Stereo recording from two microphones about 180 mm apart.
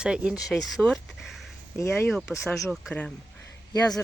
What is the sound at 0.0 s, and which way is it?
Speech, 5° right (ahead or behind).